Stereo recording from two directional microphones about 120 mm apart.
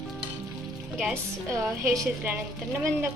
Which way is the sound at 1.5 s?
25° right (ahead or behind).